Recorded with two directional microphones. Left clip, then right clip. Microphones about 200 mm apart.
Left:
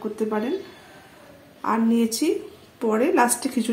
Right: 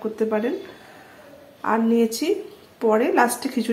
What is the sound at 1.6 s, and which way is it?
Speech, 5° right (ahead or behind).